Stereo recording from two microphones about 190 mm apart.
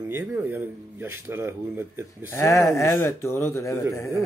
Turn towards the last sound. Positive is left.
turn(degrees=15)  # may be behind; listen again after turning